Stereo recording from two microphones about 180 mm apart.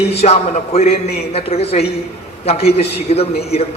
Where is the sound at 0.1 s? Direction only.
35° left (ahead or behind).